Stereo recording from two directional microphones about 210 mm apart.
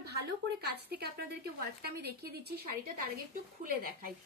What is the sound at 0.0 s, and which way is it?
A woman's voice, 50° right (ahead or behind).